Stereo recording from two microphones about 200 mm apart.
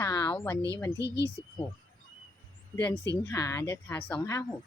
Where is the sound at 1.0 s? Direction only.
55° left (ahead or behind).